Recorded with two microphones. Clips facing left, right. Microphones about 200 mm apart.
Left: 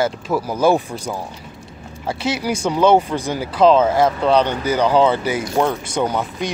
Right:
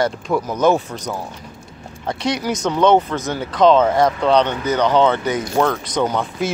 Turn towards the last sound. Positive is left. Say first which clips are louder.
# right 1 dB
turn(degrees=10)  # may be behind; listen again after turning